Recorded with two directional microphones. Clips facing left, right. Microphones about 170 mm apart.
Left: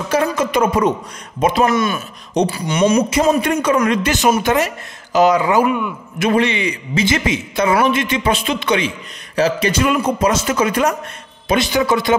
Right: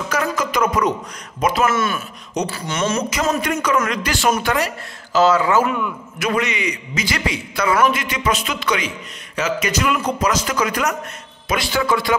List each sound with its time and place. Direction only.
0.1 s a man's voice: 30° left (ahead or behind)
1.7 s speech: 15° left (ahead or behind)
3.4 s a man's voice: 30° left (ahead or behind); by 5.8 s 15° left (ahead or behind)
6.1 s a man's voice: 30° left (ahead or behind)